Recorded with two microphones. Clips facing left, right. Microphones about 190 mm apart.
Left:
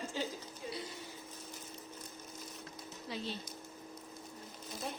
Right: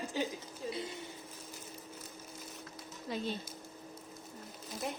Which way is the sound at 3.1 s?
50° right (ahead or behind).